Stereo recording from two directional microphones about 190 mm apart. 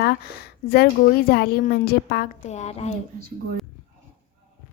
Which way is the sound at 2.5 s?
35° left (ahead or behind).